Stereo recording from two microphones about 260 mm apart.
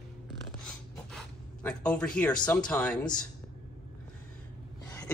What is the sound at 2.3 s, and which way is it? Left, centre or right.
Speech, centre.